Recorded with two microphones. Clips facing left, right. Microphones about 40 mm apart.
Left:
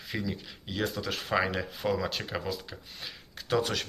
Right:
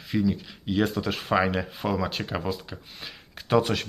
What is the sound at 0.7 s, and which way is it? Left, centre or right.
Speech, centre.